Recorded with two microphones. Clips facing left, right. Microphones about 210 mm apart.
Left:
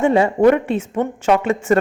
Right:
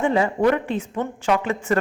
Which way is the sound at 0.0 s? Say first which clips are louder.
Left 6 dB; 25° left (ahead or behind).